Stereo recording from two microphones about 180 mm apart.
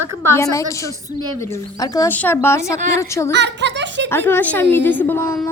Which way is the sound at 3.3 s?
75° right (ahead or behind).